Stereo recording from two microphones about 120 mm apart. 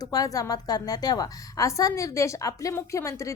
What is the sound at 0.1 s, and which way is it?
A woman's voice, 30° left (ahead or behind).